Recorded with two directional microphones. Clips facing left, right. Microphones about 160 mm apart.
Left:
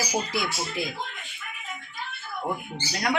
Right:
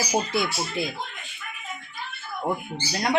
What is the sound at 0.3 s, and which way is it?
Speech, 25° right (ahead or behind).